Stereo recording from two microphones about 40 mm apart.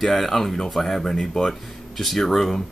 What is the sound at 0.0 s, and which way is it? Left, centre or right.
Speech, centre.